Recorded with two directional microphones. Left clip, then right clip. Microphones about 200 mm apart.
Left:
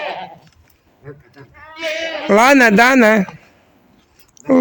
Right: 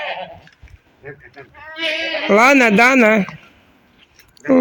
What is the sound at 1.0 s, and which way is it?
Speech, 60° left (ahead or behind).